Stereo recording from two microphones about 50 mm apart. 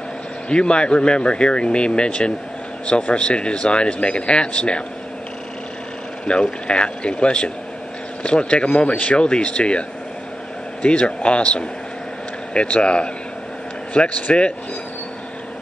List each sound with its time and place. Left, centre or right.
0.5 s speech: centre
6.2 s speech: centre